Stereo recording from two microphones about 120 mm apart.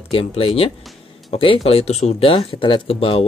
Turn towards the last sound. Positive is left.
turn(degrees=55)  # may be behind; listen again after turning